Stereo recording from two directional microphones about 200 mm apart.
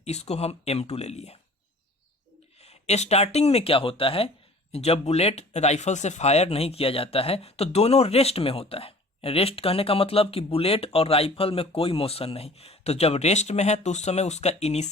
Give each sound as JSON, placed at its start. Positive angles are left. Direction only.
{"t": 0.0, "sound": "speech", "side_deg": 30}
{"t": 2.6, "sound": "speech", "side_deg": 30}